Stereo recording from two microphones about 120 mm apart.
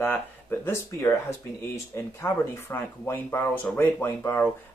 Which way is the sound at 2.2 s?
20° left (ahead or behind).